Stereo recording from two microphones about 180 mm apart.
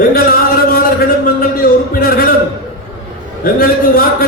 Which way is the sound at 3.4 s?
55° left (ahead or behind).